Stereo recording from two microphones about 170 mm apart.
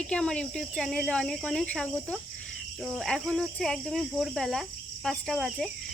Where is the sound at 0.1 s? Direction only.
5° left (ahead or behind).